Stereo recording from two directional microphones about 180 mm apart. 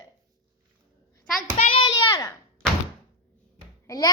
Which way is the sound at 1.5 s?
30° left (ahead or behind).